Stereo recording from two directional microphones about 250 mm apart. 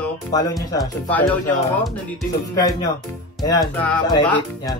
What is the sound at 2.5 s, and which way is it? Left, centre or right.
Speech, centre.